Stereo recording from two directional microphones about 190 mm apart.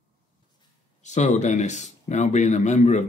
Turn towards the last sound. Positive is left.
turn(degrees=40)  # may be behind; listen again after turning